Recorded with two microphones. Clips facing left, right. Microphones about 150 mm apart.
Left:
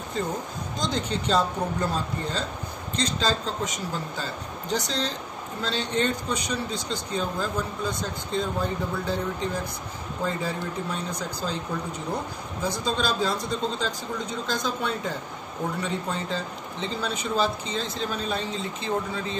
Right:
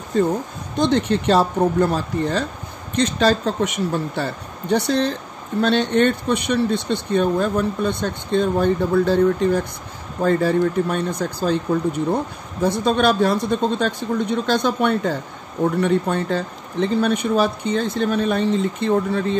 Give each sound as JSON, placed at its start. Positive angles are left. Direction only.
{"t": 0.7, "sound": "speech", "side_deg": -65}